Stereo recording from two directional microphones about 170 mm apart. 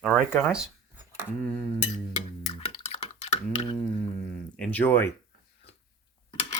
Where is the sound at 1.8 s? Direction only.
40° left (ahead or behind).